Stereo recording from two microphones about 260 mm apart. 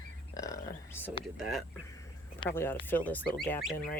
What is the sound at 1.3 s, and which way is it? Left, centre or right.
Speech, centre.